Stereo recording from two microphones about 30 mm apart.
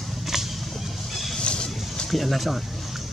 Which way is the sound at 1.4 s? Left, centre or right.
Left.